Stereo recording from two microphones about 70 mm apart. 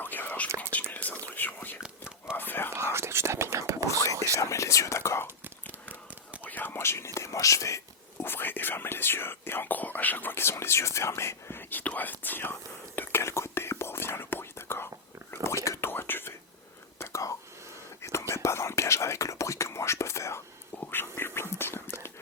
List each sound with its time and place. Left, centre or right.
0.0 s whispering: left
1.8 s whispering: centre
2.3 s whispering: left
2.7 s whispering: right
3.5 s whispering: right
3.8 s whispering: left
5.6 s whispering: right
6.4 s whispering: left
8.2 s whispering: left
11.7 s whispering: left
15.4 s a sound: left
15.9 s whispering: left
17.0 s whispering: left